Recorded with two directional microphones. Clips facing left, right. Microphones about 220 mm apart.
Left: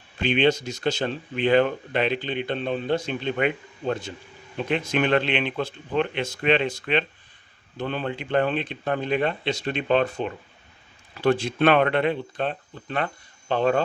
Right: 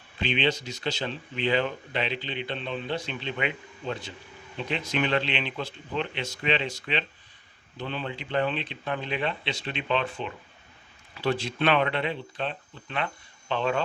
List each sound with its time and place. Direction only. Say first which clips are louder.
0.2 s speech: left 6 dB; 50° left (ahead or behind)